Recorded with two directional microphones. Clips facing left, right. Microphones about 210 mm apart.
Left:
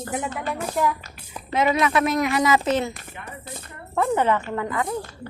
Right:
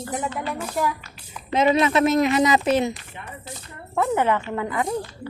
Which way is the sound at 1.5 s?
20° right (ahead or behind).